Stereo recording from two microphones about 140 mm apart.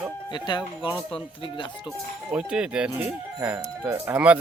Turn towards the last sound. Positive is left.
turn(degrees=-10)  # may be behind; listen again after turning